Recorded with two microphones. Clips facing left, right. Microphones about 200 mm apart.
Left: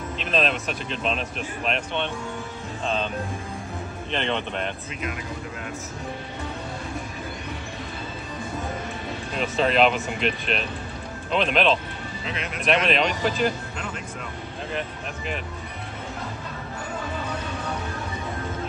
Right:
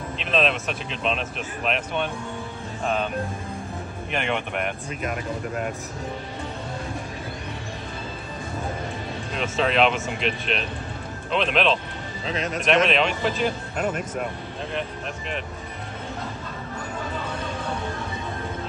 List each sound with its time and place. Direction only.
0.2 s speech: centre (ahead or behind)
4.1 s speech: 10° right (ahead or behind)
9.4 s speech: centre (ahead or behind)
12.3 s a man's voice: 40° right (ahead or behind)
12.6 s speech: centre (ahead or behind)
14.7 s speech: centre (ahead or behind)